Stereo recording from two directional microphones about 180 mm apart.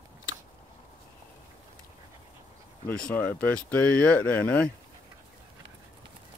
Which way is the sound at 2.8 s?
5° left (ahead or behind).